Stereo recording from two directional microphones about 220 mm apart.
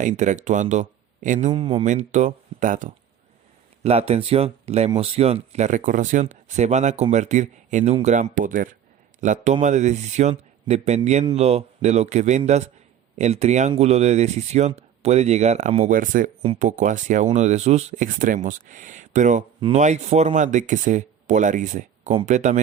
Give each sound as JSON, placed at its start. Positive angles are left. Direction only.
{"t": 0.0, "sound": "speech", "side_deg": -35}